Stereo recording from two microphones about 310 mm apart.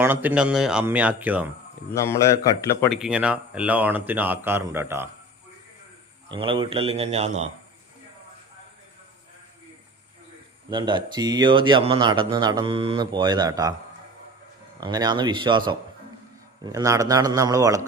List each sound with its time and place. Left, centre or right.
0.0 s speech: centre
1.9 s speech: centre
6.2 s a man's voice: centre
10.7 s a man's voice: centre
14.8 s a man's voice: centre